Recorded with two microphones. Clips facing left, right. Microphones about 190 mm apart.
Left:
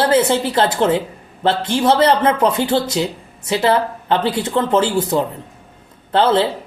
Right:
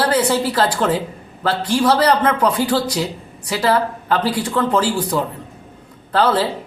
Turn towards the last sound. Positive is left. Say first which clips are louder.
# left 2 dB
turn(degrees=25)  # may be behind; listen again after turning